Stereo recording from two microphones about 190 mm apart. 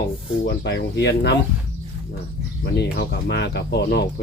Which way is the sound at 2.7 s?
60° left (ahead or behind).